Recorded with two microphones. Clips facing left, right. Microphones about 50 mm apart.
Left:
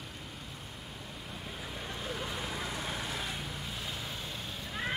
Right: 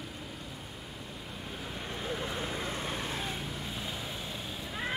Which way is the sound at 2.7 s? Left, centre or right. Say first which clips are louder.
Right 2 dB; right.